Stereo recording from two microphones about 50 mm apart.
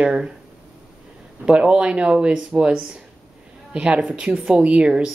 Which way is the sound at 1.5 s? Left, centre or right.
Centre.